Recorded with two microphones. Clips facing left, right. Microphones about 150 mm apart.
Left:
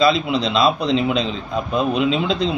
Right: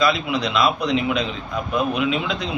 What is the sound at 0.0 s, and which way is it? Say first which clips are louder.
A man's voice: left 3 dB; 25° left (ahead or behind).